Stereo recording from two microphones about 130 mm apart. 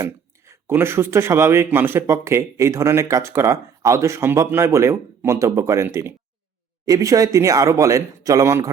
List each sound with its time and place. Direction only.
0.0 s speech: 20° right (ahead or behind)